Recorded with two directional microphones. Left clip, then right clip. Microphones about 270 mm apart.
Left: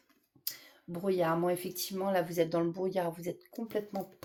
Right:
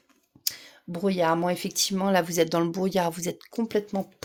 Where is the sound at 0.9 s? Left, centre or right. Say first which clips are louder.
Right 6 dB; right.